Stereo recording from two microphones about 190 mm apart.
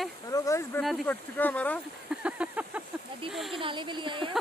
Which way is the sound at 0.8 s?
Centre (ahead or behind).